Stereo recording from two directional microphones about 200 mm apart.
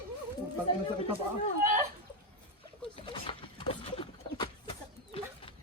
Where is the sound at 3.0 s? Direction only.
25° left (ahead or behind).